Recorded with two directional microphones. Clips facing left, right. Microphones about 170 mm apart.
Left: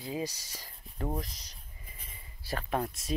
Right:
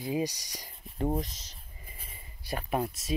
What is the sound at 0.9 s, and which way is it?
Speech, 20° right (ahead or behind).